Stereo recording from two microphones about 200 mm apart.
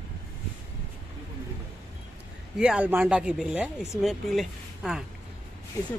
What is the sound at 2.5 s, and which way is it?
Speech, 5° right (ahead or behind).